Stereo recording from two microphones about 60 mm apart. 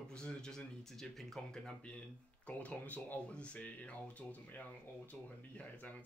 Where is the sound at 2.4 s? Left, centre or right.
Left.